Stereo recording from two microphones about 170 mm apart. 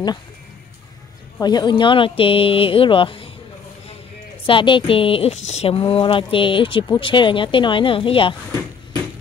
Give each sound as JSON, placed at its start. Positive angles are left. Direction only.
{"t": 1.4, "sound": "speech", "side_deg": 25}
{"t": 4.5, "sound": "speech", "side_deg": 30}